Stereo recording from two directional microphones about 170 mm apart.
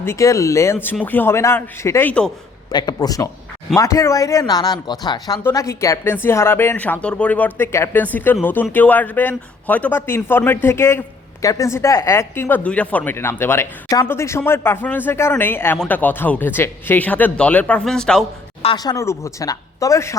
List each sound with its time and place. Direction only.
0.0 s a woman's voice: 15° left (ahead or behind)
2.6 s a woman's voice: 25° left (ahead or behind); by 18.3 s 5° left (ahead or behind)
18.8 s speech: 20° left (ahead or behind)